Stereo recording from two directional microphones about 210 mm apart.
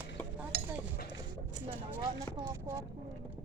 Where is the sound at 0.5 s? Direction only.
50° right (ahead or behind).